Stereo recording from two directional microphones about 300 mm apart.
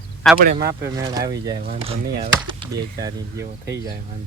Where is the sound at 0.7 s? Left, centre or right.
Centre.